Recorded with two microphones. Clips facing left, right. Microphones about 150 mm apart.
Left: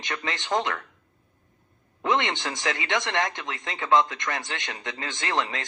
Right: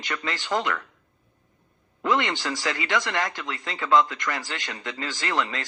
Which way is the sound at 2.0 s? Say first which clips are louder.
Right 1 dB; 20° left (ahead or behind).